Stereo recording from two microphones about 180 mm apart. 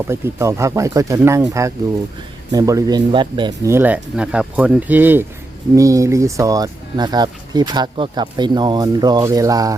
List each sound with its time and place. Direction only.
0.1 s speech: 15° right (ahead or behind)
3.7 s speech: 10° right (ahead or behind)